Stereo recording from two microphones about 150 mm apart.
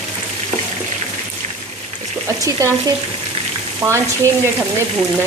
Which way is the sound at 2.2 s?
20° right (ahead or behind).